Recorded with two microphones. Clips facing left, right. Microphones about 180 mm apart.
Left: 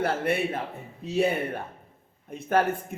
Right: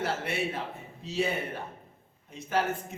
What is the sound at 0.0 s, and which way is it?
A man's voice, 55° left (ahead or behind).